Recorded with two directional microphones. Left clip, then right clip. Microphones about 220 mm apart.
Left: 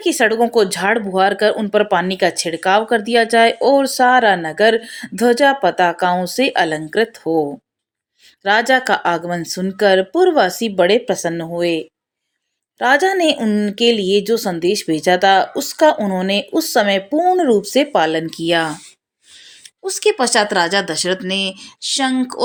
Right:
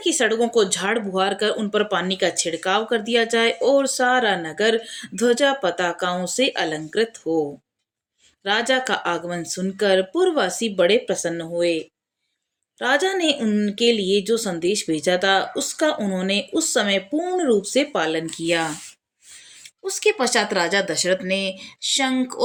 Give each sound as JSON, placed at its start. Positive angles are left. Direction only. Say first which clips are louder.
{"t": 0.0, "sound": "speech", "louder": "left 5 dB", "side_deg": 15}
{"t": 8.4, "sound": "speech", "louder": "left 7 dB", "side_deg": 15}
{"t": 12.8, "sound": "speech", "louder": "left 6 dB", "side_deg": 15}
{"t": 19.8, "sound": "speech", "louder": "left 4 dB", "side_deg": 15}